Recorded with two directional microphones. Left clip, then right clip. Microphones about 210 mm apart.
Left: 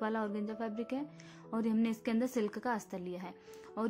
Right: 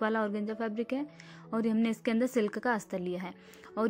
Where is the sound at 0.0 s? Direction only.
20° right (ahead or behind).